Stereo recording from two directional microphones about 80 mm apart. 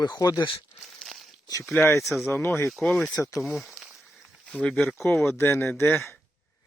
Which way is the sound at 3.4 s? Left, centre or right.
Centre.